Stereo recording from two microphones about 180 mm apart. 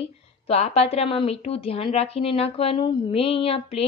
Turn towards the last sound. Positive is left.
turn(degrees=35)  # may be behind; listen again after turning